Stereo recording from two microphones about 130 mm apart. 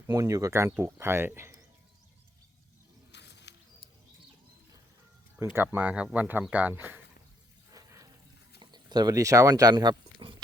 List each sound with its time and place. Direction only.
0.1 s speech: 25° right (ahead or behind)
5.5 s speech: 15° right (ahead or behind)
7.7 s water: 25° right (ahead or behind)
8.5 s speech: 35° right (ahead or behind)